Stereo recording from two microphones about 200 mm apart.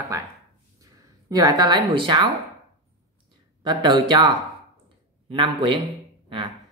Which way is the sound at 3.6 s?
20° right (ahead or behind).